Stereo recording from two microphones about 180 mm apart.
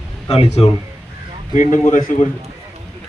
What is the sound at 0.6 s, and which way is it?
Speech, 30° left (ahead or behind).